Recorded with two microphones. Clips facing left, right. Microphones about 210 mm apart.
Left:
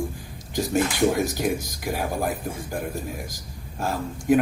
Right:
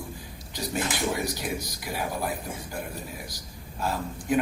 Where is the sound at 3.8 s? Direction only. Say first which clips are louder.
Left 3 dB; 50° left (ahead or behind).